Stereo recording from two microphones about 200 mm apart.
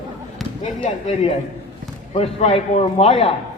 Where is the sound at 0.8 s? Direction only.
35° left (ahead or behind).